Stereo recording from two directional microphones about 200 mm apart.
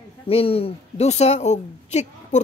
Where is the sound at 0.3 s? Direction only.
30° left (ahead or behind).